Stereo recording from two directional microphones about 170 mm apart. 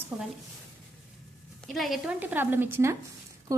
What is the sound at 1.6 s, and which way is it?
A woman's voice, centre (ahead or behind).